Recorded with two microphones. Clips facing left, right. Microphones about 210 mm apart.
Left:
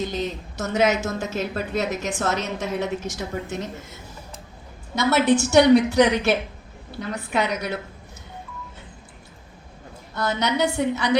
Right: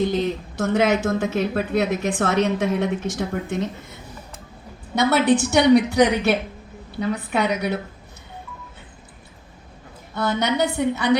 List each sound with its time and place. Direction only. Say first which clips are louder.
0.0 s speech: right 5 dB; 55° right (ahead or behind)
4.9 s speech: right 1 dB; 60° right (ahead or behind)
10.2 s speech: right 2 dB; 55° right (ahead or behind)